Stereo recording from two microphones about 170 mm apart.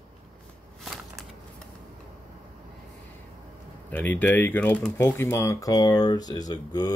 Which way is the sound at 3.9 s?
10° left (ahead or behind).